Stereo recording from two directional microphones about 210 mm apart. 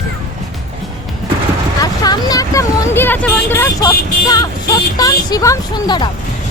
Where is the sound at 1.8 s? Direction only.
20° left (ahead or behind).